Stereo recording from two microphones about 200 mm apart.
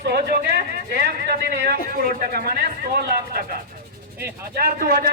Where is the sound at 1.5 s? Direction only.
50° right (ahead or behind).